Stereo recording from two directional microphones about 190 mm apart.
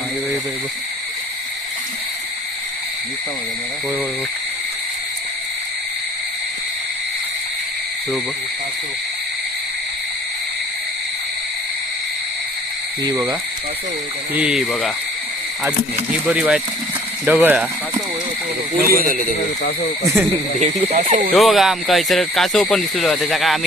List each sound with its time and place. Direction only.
13.1 s frog: 20° right (ahead or behind)
14.4 s speech: 5° right (ahead or behind)
16.1 s speech: 5° right (ahead or behind)
18.9 s speech: 50° right (ahead or behind)
20.6 s speech: 40° right (ahead or behind)
21.3 s speech: centre (ahead or behind)